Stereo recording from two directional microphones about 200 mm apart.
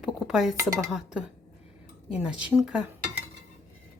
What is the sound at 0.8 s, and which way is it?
Speech, centre (ahead or behind).